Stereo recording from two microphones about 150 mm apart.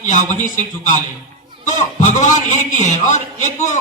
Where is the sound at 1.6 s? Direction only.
55° left (ahead or behind).